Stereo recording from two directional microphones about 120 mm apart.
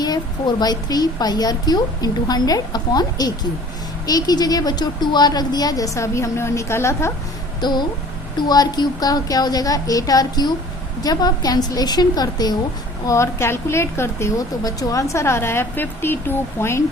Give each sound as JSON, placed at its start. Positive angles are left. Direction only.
{"t": 0.0, "sound": "a woman's voice", "side_deg": 35}
{"t": 7.6, "sound": "a woman's voice", "side_deg": 35}